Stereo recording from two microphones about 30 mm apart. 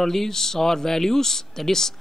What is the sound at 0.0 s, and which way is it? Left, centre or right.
Speech, centre.